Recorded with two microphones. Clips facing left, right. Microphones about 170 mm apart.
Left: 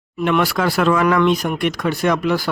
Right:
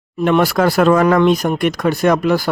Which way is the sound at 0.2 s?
40° right (ahead or behind).